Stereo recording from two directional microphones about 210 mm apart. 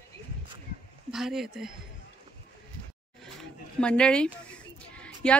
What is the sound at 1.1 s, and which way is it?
Speech, centre (ahead or behind).